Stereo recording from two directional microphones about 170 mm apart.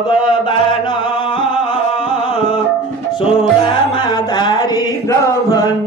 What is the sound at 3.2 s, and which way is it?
Music, 30° left (ahead or behind).